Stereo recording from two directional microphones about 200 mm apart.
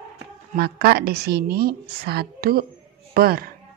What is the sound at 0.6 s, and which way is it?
A woman's voice, 55° right (ahead or behind).